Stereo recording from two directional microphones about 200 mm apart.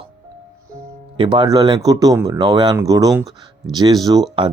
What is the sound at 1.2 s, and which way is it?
Speech, 25° right (ahead or behind).